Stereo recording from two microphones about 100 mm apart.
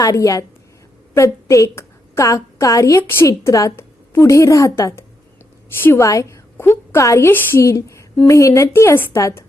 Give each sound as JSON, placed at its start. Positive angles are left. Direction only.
{"t": 0.0, "sound": "a woman's voice", "side_deg": 35}